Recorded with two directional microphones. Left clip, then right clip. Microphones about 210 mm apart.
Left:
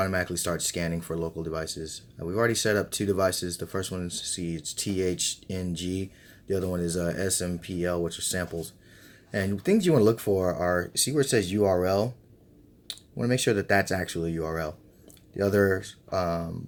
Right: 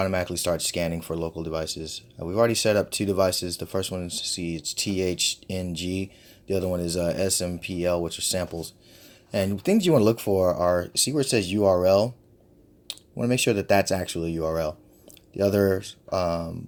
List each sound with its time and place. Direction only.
0.0 s speech: 20° right (ahead or behind)